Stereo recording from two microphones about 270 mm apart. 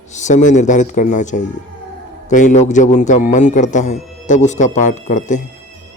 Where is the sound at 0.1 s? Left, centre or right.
Left.